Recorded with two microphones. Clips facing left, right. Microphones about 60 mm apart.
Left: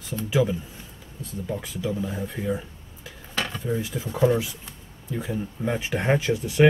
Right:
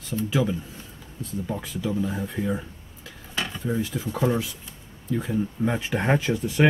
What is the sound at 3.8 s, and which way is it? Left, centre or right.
Speech, centre.